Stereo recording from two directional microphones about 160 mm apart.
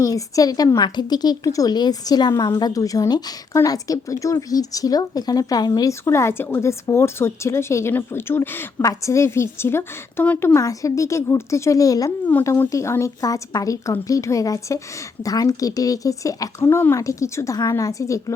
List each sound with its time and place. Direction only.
0.0 s speech: 20° left (ahead or behind)